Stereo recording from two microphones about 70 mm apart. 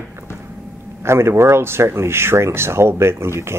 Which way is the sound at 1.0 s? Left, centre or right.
Right.